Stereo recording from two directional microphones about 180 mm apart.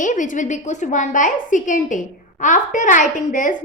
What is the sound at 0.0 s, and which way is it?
A woman's voice, 45° left (ahead or behind).